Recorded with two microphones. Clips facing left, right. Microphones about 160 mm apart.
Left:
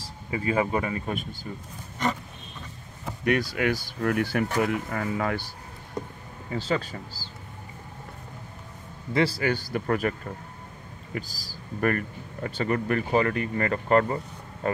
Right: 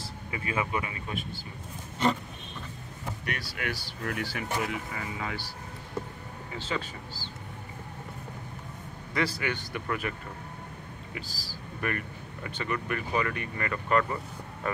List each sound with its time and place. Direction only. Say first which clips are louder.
0.3 s speech: left 6 dB; 35° left (ahead or behind)
3.3 s speech: left 12 dB; 50° left (ahead or behind)
6.0 s a sound: left 2 dB; 15° left (ahead or behind)
6.5 s speech: left 7 dB; 40° left (ahead or behind)
9.1 s speech: left 6 dB; 30° left (ahead or behind)
12.4 s speech: left 6 dB; 35° left (ahead or behind)